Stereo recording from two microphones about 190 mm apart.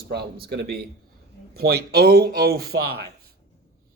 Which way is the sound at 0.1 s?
55° right (ahead or behind).